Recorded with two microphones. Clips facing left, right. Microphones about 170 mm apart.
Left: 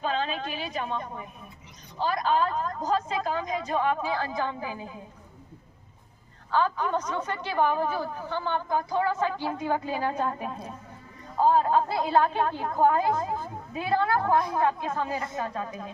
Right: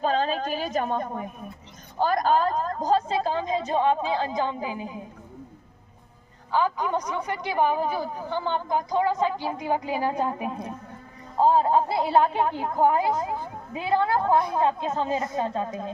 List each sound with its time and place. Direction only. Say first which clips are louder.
0.0 s a woman's voice: right 5 dB; 40° right (ahead or behind); by 5.0 s 15° right (ahead or behind)
6.5 s a woman's voice: right 1 dB; 15° right (ahead or behind)